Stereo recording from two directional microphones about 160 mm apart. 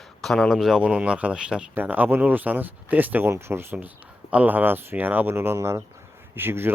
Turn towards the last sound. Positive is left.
turn(degrees=-15)  # may be behind; listen again after turning